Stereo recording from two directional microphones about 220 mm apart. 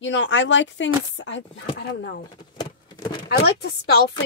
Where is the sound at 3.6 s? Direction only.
50° left (ahead or behind).